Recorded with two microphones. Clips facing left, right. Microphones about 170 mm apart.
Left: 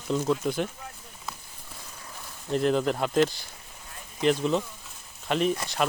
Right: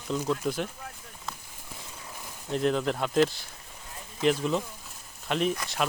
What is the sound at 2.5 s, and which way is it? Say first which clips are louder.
Speech: left 2 dB; centre (ahead or behind).